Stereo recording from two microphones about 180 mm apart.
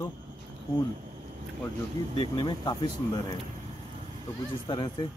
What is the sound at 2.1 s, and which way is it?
Speech, 25° left (ahead or behind).